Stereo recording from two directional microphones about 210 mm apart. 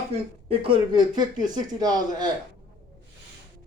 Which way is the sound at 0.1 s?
25° right (ahead or behind).